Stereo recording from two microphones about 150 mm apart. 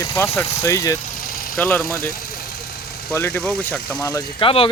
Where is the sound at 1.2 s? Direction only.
75° left (ahead or behind).